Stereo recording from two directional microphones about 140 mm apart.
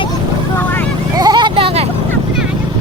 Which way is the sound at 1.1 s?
30° right (ahead or behind).